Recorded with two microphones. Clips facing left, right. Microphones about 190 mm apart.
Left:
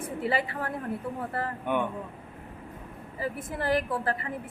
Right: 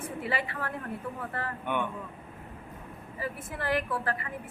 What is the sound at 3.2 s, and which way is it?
A man's voice, 40° left (ahead or behind).